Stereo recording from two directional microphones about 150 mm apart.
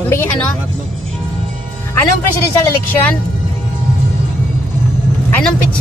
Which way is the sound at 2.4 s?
15° left (ahead or behind).